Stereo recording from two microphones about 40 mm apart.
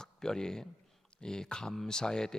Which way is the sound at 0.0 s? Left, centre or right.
Centre.